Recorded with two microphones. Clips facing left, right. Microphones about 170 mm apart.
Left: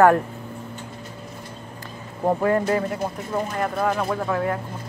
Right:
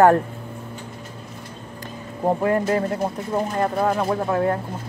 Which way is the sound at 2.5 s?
35° right (ahead or behind).